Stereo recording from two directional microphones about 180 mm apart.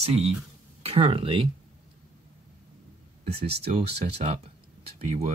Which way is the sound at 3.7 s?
35° right (ahead or behind).